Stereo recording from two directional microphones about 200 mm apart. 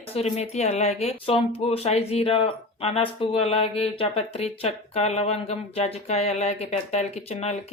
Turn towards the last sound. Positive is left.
turn(degrees=30)  # may be behind; listen again after turning